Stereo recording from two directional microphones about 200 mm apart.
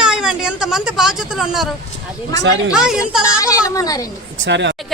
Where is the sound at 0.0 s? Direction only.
5° right (ahead or behind).